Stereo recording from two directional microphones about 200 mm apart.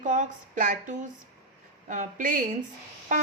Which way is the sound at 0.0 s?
40° right (ahead or behind).